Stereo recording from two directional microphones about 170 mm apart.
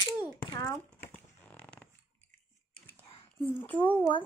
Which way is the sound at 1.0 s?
10° left (ahead or behind).